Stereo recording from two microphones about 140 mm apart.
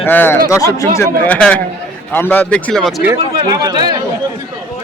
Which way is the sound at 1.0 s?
10° left (ahead or behind).